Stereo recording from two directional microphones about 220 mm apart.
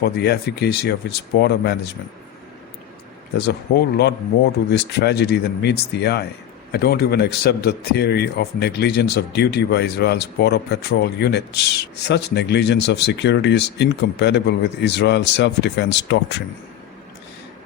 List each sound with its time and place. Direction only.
0.0 s a man's voice: 50° left (ahead or behind)
3.3 s a man's voice: 50° left (ahead or behind)